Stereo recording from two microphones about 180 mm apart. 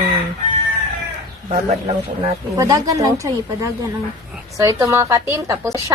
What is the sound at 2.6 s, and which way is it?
A woman's voice, 20° right (ahead or behind).